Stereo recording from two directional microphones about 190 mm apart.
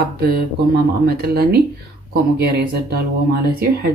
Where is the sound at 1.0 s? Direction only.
55° right (ahead or behind).